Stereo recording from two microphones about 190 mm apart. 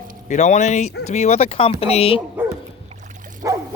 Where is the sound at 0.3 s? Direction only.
35° left (ahead or behind).